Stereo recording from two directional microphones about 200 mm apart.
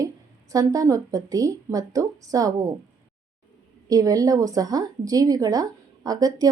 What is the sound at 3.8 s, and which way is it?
A woman's voice, 15° right (ahead or behind).